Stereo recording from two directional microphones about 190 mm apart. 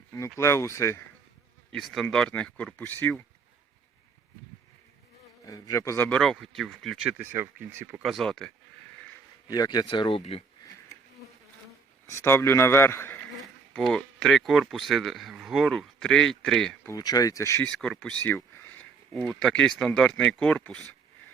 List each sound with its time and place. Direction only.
0.1 s a man's voice: 15° left (ahead or behind)
1.7 s speech: centre (ahead or behind)
5.5 s a man's voice: 20° left (ahead or behind)
6.1 s speech: 5° left (ahead or behind); by 8.0 s 10° right (ahead or behind)
8.0 s speech: centre (ahead or behind)
9.5 s speech: 20° left (ahead or behind)
12.0 s a man's voice: 15° left (ahead or behind)
13.4 s speech: centre (ahead or behind)
16.9 s a man's voice: 20° left (ahead or behind)
17.7 s speech: 5° left (ahead or behind)
18.3 s a sound: 10° left (ahead or behind)
19.8 s speech: 5° left (ahead or behind)